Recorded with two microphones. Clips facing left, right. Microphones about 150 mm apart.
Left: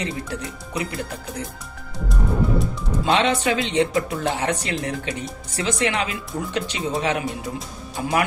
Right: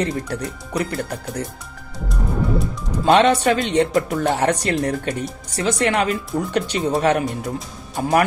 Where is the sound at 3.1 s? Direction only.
50° right (ahead or behind).